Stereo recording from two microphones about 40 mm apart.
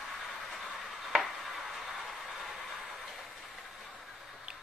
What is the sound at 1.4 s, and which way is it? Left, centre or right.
Train, centre.